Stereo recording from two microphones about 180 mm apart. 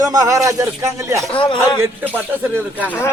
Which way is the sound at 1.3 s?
25° left (ahead or behind).